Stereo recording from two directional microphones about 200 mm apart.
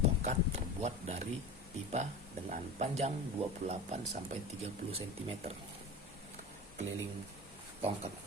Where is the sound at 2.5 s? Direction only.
35° right (ahead or behind).